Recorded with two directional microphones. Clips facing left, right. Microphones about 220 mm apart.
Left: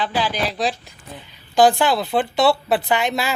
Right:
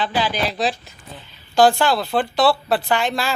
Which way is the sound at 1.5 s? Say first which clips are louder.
Even; 20° left (ahead or behind).